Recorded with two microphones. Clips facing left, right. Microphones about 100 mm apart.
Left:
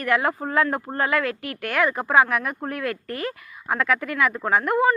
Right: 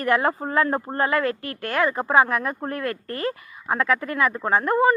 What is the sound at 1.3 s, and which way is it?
Speech, 90° left.